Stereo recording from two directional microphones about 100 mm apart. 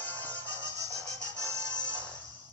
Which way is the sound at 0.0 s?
15° left (ahead or behind).